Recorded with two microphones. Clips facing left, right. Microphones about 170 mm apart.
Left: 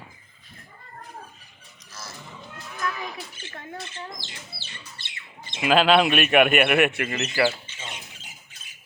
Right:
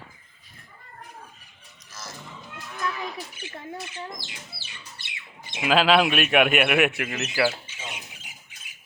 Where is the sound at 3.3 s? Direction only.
15° right (ahead or behind).